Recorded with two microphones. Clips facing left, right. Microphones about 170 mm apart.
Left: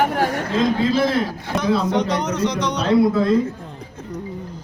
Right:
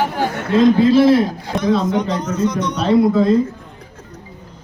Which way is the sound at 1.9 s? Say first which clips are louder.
Right 1 dB; 70° left (ahead or behind).